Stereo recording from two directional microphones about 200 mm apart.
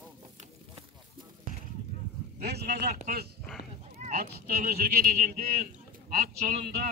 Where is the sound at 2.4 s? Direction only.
55° right (ahead or behind).